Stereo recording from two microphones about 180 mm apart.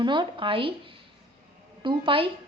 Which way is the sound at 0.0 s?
25° right (ahead or behind).